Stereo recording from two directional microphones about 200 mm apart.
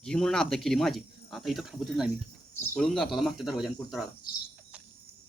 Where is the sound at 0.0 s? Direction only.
5° left (ahead or behind).